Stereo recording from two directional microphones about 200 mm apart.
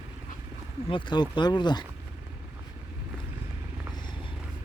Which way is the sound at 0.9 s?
25° left (ahead or behind).